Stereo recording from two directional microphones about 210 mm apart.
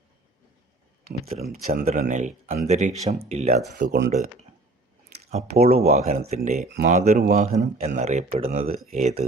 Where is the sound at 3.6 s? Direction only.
50° right (ahead or behind).